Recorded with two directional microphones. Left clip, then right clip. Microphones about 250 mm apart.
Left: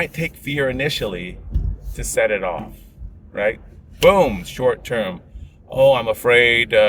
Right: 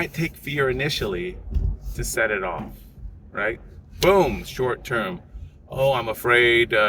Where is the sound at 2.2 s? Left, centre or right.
Centre.